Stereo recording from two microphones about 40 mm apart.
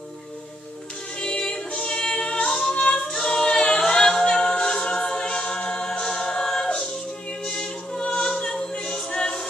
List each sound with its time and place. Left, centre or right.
1.2 s music: left
2.7 s a capella: left
3.1 s a capella: centre
5.9 s choir: centre
7.4 s a capella: centre